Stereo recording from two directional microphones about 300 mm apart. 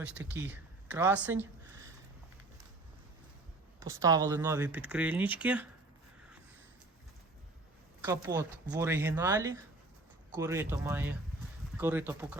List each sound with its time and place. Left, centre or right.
0.0 s speech: centre
3.8 s speech: centre
8.0 s speech: centre